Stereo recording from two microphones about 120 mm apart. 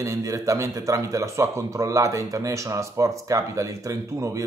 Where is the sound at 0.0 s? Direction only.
25° right (ahead or behind).